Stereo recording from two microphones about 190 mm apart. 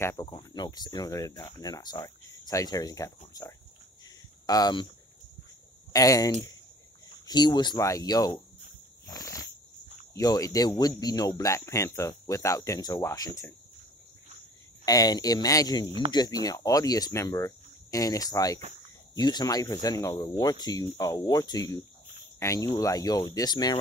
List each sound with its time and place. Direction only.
0.0 s speech: 15° left (ahead or behind)
5.9 s speech: 20° left (ahead or behind)
9.0 s insect: 20° left (ahead or behind)
10.1 s speech: 20° left (ahead or behind)
14.9 s speech: 20° left (ahead or behind)